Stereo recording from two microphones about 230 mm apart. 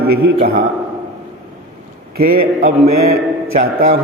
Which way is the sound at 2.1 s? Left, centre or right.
Right.